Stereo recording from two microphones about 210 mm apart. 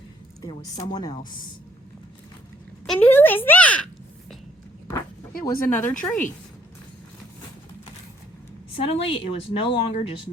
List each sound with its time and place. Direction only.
0.4 s speech: 20° left (ahead or behind)
2.8 s a sound: 5° left (ahead or behind)
5.4 s speech: 10° left (ahead or behind)
8.9 s speech: 25° left (ahead or behind)